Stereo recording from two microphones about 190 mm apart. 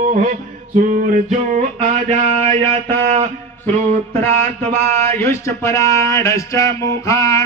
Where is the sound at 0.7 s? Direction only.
40° right (ahead or behind).